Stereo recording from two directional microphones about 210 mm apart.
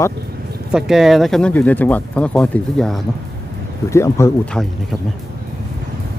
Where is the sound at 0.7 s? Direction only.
Centre (ahead or behind).